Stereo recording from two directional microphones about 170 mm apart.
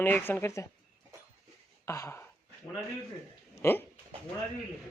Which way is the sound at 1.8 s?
15° left (ahead or behind).